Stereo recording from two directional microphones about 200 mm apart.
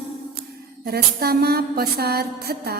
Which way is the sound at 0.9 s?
50° right (ahead or behind).